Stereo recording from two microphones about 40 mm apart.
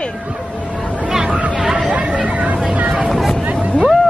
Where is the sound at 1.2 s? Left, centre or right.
Right.